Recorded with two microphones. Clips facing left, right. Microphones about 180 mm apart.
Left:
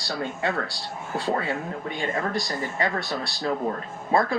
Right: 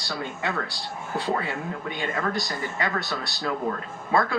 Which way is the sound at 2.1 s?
30° left (ahead or behind).